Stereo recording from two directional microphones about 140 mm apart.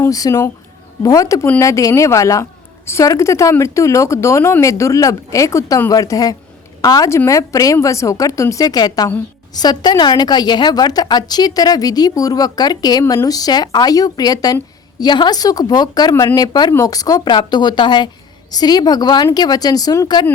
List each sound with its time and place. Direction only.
0.0 s a woman's voice: 25° left (ahead or behind)